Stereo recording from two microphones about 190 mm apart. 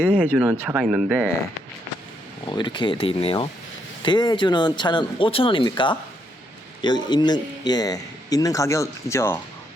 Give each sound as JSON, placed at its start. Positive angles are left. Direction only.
{"t": 0.2, "sound": "speech", "side_deg": -5}
{"t": 2.5, "sound": "a man's voice", "side_deg": 25}